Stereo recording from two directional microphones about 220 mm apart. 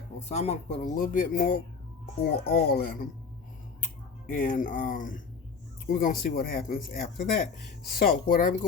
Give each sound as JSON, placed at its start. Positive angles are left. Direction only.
{"t": 0.3, "sound": "speech", "side_deg": 30}
{"t": 4.3, "sound": "speech", "side_deg": 40}